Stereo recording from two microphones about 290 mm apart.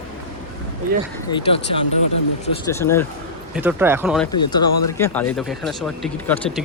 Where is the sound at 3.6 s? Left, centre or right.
Centre.